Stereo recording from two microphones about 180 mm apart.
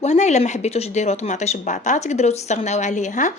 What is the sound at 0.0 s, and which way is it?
Speech, 40° left (ahead or behind).